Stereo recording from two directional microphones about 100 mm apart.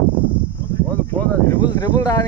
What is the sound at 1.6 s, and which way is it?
Speech, 45° left (ahead or behind).